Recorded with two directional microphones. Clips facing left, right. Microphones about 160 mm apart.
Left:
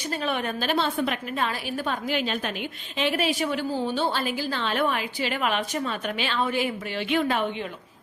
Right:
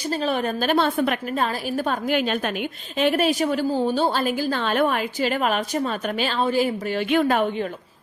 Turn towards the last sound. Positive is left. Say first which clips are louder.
# right 5 dB
turn(degrees=-45)  # may be behind; listen again after turning